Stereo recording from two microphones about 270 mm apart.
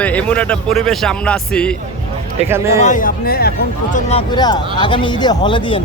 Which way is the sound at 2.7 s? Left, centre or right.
Left.